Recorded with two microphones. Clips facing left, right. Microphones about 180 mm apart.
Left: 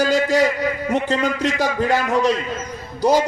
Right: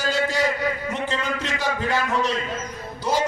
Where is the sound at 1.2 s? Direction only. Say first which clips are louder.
Left 7 dB; 40° left (ahead or behind).